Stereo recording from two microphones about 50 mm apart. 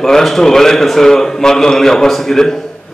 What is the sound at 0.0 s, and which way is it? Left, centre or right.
A man's voice, centre.